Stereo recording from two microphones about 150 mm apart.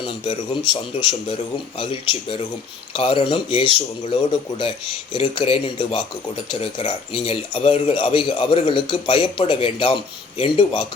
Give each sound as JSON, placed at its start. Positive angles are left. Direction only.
{"t": 0.0, "sound": "speech", "side_deg": 30}